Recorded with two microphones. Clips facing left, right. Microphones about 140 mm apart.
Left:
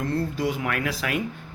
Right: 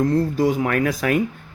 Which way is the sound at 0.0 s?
45° right (ahead or behind).